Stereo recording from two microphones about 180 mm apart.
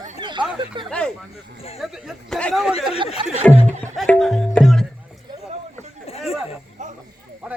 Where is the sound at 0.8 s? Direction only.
25° right (ahead or behind).